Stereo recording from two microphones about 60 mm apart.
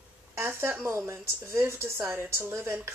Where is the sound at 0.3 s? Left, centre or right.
Right.